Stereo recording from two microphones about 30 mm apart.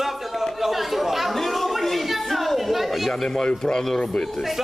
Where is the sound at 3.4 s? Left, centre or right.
Left.